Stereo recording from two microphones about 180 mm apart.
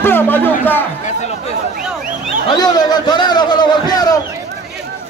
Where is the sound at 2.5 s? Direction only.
20° left (ahead or behind).